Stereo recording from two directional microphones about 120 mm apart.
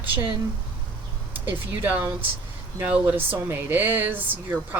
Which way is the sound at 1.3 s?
15° right (ahead or behind).